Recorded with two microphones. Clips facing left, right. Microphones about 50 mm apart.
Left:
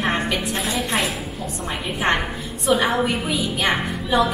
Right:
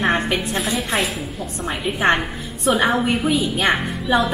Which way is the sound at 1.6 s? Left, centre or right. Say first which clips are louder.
Right 4 dB; centre.